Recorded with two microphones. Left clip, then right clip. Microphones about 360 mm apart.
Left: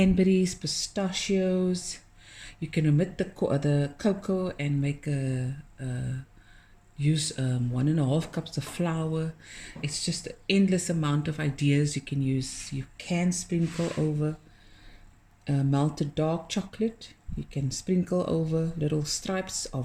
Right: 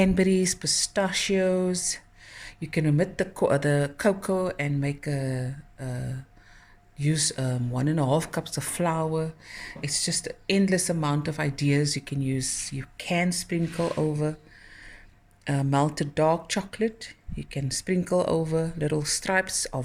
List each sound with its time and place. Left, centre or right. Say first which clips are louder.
0.0 s speech: right 2 dB; centre
7.0 s speech: right 3 dB; centre
15.4 s speech: right 4 dB; centre